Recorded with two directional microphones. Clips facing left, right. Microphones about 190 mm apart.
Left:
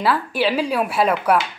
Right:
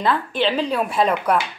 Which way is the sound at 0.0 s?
5° left (ahead or behind).